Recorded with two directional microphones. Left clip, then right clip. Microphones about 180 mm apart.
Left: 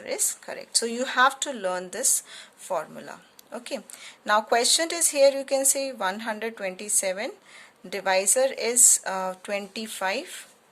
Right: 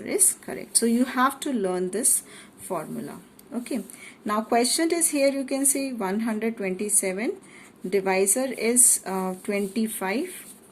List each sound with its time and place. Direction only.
0.0 s speech: 20° left (ahead or behind)